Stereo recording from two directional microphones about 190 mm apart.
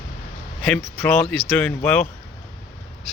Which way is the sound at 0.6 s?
5° left (ahead or behind).